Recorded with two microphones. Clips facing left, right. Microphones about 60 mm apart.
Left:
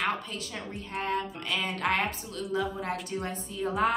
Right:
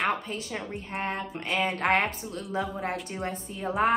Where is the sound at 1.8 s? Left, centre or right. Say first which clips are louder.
Right 2 dB; right.